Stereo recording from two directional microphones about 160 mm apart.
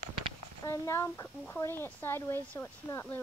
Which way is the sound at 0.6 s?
20° left (ahead or behind).